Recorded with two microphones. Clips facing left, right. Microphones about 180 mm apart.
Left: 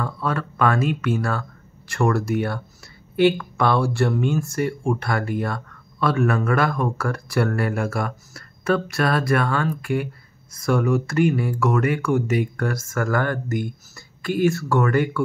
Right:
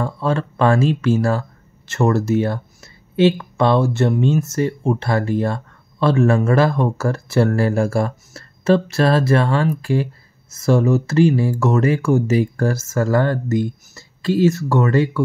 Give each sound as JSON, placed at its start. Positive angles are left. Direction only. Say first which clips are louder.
{"t": 0.0, "sound": "speech", "louder": "right 5 dB", "side_deg": -25}